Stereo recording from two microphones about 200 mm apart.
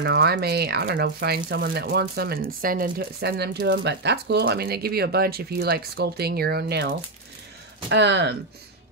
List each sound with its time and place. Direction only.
0.0 s speech: 55° right (ahead or behind)